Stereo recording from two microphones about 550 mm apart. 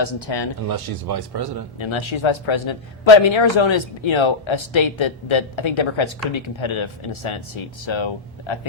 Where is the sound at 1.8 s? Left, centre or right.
Left.